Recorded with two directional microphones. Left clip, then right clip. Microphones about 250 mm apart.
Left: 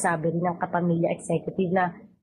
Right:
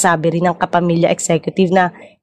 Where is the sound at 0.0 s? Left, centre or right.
Right.